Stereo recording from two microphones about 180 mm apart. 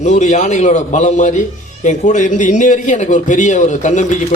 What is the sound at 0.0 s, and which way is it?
Speech, 40° left (ahead or behind).